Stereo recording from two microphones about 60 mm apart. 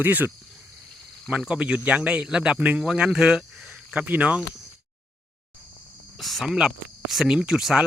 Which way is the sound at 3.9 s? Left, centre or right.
Right.